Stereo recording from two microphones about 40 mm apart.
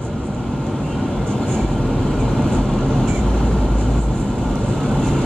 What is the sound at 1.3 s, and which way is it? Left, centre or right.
Vehicle, centre.